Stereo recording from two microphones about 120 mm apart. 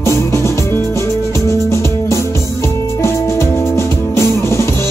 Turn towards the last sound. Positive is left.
turn(degrees=20)  # may be behind; listen again after turning